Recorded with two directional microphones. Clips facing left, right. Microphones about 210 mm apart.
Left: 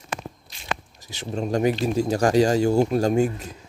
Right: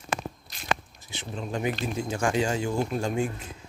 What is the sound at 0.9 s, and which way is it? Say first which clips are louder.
Speech: left 7 dB; 40° left (ahead or behind).